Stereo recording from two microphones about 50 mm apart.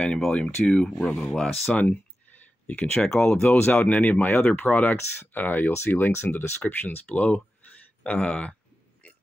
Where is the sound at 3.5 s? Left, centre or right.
Left.